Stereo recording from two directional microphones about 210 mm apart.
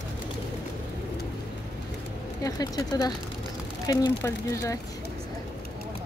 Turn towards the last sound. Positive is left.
turn(degrees=15)  # may be behind; listen again after turning